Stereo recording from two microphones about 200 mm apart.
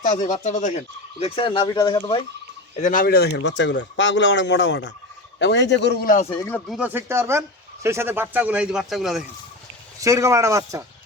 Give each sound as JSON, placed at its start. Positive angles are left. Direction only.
{"t": 0.3, "sound": "speech", "side_deg": 35}
{"t": 1.2, "sound": "speech", "side_deg": 25}
{"t": 2.7, "sound": "speech", "side_deg": 40}
{"t": 6.2, "sound": "speech", "side_deg": 15}
{"t": 6.7, "sound": "speech", "side_deg": -5}
{"t": 10.0, "sound": "speech", "side_deg": -15}